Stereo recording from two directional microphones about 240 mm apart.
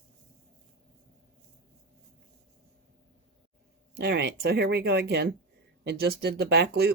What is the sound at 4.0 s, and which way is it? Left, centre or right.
Speech, right.